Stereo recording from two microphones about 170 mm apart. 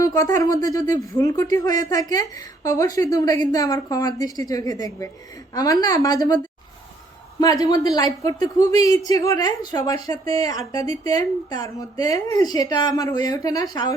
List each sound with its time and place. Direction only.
0.0 s a woman's voice: 20° left (ahead or behind)